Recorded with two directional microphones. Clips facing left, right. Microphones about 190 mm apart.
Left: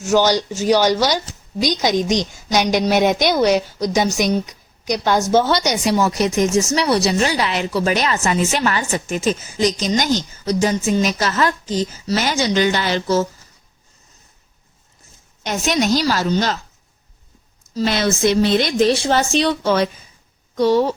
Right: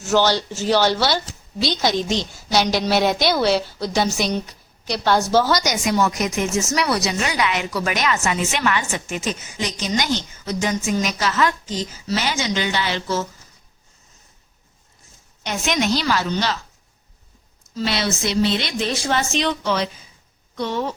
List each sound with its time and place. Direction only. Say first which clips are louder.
0.0 s a woman's voice: left 3 dB; 15° left (ahead or behind); by 13.2 s 40° left (ahead or behind)
15.4 s a woman's voice: left 3 dB; 40° left (ahead or behind)
17.7 s a woman's voice: left 5 dB; 50° left (ahead or behind)